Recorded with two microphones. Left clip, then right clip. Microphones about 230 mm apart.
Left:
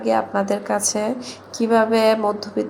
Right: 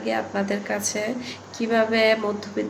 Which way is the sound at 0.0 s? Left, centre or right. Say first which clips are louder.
Left 6 dB; centre.